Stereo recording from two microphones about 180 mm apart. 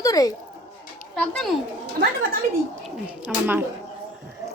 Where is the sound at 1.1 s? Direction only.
5° left (ahead or behind).